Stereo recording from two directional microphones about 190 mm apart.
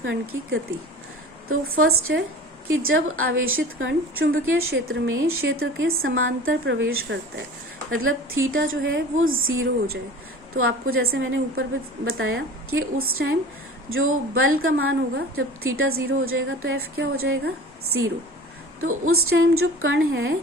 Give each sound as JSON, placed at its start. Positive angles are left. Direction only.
{"t": 0.0, "sound": "speech", "side_deg": -90}
{"t": 7.9, "sound": "speech", "side_deg": -90}
{"t": 16.7, "sound": "a woman's voice", "side_deg": -80}
{"t": 18.8, "sound": "speech", "side_deg": -90}